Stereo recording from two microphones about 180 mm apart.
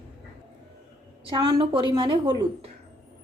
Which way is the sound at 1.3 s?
20° right (ahead or behind).